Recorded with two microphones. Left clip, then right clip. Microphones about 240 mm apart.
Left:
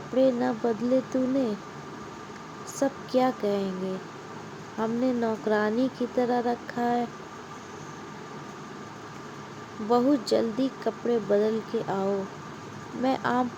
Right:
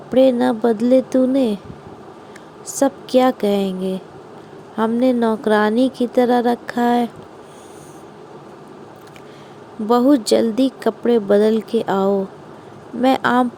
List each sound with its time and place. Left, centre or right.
0.2 s speech: right
2.6 s speech: right
9.9 s speech: right